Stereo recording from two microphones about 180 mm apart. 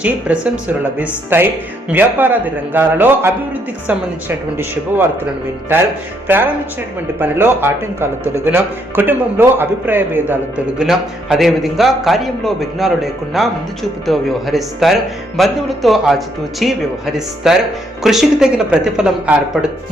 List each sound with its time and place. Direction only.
0.0 s speech: 5° right (ahead or behind)
6.2 s a man's voice: 10° right (ahead or behind)